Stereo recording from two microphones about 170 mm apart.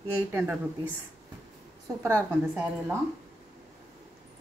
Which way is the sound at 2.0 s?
15° right (ahead or behind).